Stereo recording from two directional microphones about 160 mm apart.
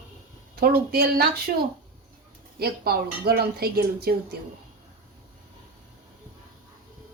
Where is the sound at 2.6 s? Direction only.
75° right (ahead or behind).